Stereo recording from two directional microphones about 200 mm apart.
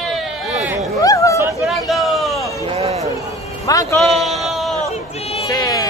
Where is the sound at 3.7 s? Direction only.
15° left (ahead or behind).